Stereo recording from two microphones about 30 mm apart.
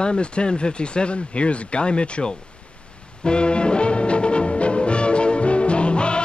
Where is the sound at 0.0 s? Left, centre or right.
Left.